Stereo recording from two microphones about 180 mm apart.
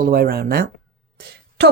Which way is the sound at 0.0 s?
60° right (ahead or behind).